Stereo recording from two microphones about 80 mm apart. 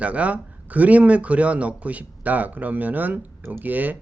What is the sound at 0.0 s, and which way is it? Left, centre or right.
Speech, centre.